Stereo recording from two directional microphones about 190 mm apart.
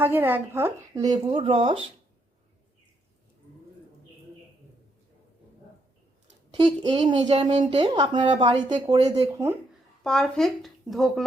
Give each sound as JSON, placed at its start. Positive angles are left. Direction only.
{"t": 0.0, "sound": "a woman's voice", "side_deg": -10}
{"t": 6.6, "sound": "a woman's voice", "side_deg": -25}
{"t": 10.0, "sound": "speech", "side_deg": 5}